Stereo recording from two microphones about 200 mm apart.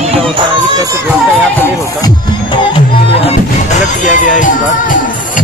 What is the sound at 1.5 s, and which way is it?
Music, 10° left (ahead or behind).